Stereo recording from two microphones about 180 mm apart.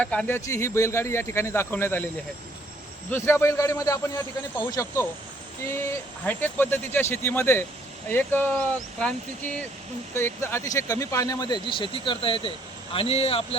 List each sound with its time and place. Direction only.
0.0 s speech: 5° left (ahead or behind)
3.1 s speech: 15° left (ahead or behind); by 13.6 s 35° left (ahead or behind)